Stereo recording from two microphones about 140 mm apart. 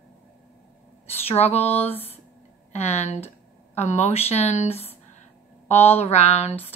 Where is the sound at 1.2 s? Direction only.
50° left (ahead or behind).